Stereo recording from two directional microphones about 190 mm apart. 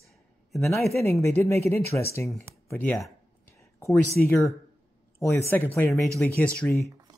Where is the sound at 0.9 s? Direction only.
15° left (ahead or behind).